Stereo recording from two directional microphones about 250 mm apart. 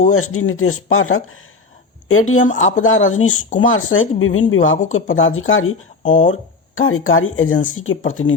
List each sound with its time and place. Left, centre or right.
0.1 s speech: left